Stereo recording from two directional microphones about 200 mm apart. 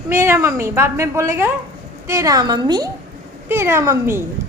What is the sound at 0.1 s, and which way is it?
A woman's voice, 15° right (ahead or behind).